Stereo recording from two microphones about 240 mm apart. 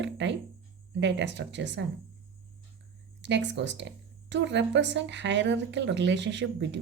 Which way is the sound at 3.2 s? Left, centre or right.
Right.